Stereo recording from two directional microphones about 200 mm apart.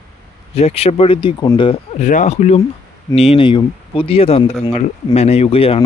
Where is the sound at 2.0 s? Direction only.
40° left (ahead or behind).